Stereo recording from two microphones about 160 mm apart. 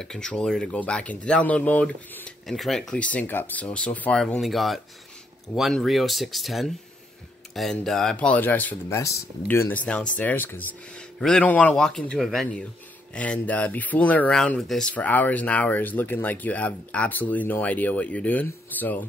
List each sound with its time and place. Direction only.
0.0 s speech: 5° left (ahead or behind)